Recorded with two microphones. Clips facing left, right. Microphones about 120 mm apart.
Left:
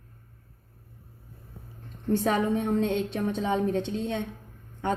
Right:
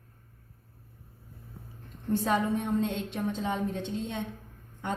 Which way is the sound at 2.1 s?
90° left.